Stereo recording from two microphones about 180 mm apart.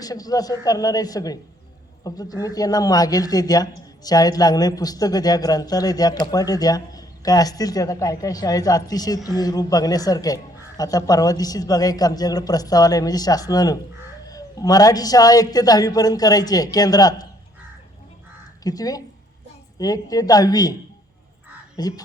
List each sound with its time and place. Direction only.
0.0 s speech: 20° left (ahead or behind)
18.6 s speech: 20° left (ahead or behind)
21.8 s speech: 20° left (ahead or behind)